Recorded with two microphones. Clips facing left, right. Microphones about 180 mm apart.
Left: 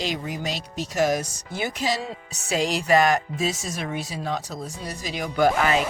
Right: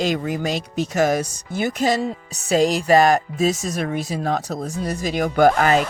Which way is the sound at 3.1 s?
55° right (ahead or behind).